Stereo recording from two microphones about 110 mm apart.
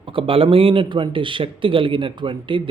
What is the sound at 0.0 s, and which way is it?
Speech, 55° right (ahead or behind).